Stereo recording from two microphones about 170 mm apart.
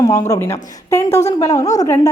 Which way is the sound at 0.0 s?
20° left (ahead or behind).